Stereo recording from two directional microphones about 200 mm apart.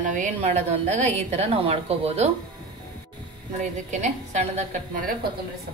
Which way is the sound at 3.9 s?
35° right (ahead or behind).